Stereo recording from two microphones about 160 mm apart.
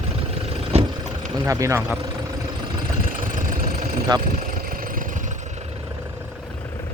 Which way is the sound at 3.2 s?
55° right (ahead or behind).